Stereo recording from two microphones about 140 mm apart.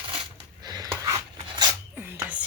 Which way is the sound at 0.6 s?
30° right (ahead or behind).